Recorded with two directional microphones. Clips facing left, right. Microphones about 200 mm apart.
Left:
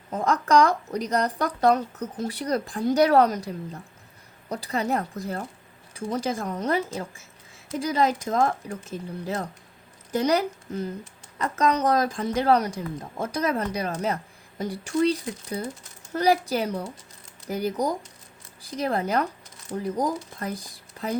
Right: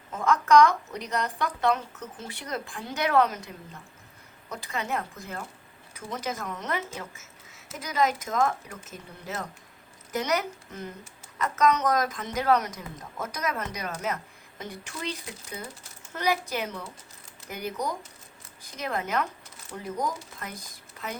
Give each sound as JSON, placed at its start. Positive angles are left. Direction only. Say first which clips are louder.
{"t": 0.1, "sound": "speech", "louder": "even", "side_deg": 35}